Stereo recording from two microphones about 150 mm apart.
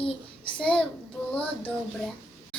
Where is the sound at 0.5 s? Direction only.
5° left (ahead or behind).